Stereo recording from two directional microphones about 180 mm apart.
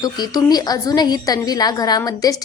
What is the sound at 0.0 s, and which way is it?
A woman's voice, 20° left (ahead or behind).